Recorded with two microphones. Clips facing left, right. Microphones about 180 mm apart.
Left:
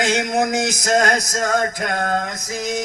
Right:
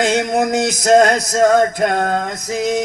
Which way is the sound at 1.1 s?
45° left (ahead or behind).